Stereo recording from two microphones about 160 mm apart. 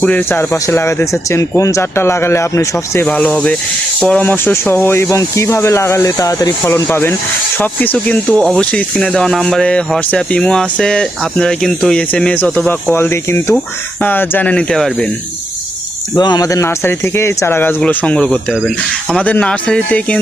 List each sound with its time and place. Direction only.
0.0 s speech: 10° left (ahead or behind)
16.1 s speech: 25° left (ahead or behind); by 20.1 s 5° left (ahead or behind)